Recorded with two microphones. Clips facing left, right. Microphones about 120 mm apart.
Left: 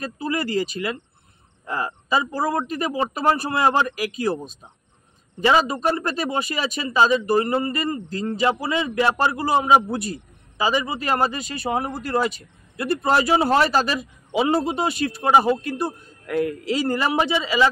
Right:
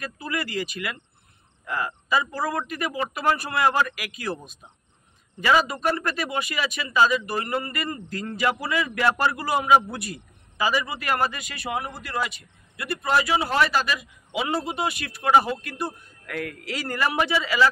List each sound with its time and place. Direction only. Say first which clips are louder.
0.0 s speech: left 5 dB; 30° left (ahead or behind)